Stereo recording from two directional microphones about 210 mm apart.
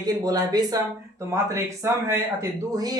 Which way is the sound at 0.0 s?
20° right (ahead or behind).